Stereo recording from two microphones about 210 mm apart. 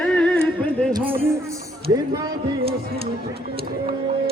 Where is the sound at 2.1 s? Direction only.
20° right (ahead or behind).